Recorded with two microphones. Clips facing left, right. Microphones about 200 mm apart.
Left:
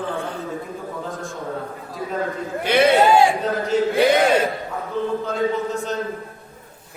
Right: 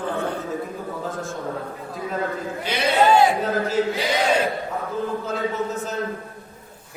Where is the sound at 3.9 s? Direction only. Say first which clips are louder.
Left 7 dB; 55° left (ahead or behind).